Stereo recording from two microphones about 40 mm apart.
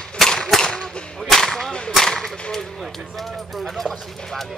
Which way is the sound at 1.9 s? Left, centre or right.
Centre.